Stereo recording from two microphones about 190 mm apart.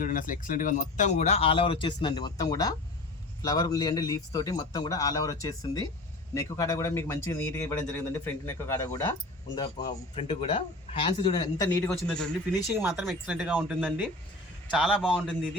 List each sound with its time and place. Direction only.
0.0 s a man's voice: 45° left (ahead or behind); by 11.4 s 25° left (ahead or behind)
11.5 s a man's voice: 15° left (ahead or behind)
11.9 s speech: 5° left (ahead or behind)
12.7 s speech: 15° right (ahead or behind)